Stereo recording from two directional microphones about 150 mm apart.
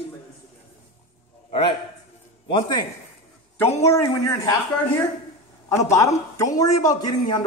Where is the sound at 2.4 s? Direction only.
30° left (ahead or behind).